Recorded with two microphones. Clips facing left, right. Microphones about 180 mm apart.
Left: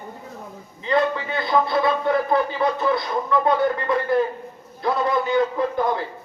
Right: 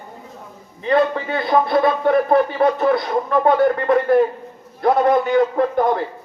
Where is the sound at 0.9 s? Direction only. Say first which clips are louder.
Right 4 dB; 60° right (ahead or behind).